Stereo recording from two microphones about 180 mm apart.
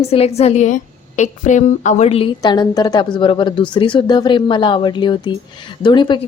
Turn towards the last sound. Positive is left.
turn(degrees=25)  # may be behind; listen again after turning